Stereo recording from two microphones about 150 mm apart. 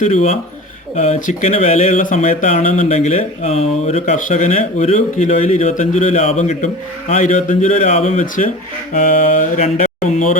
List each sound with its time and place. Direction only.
0.0 s speech: 50° left (ahead or behind)
8.9 s mantra: 55° left (ahead or behind)